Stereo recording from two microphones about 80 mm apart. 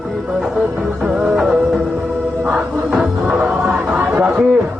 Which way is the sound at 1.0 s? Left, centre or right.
Centre.